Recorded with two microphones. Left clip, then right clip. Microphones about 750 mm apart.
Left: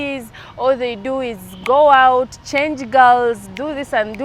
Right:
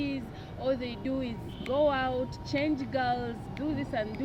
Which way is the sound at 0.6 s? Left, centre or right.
Left.